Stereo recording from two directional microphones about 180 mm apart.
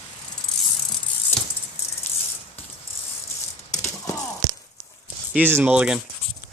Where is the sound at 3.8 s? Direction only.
15° left (ahead or behind).